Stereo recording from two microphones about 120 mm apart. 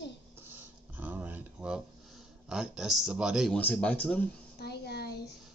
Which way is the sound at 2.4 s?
5° right (ahead or behind).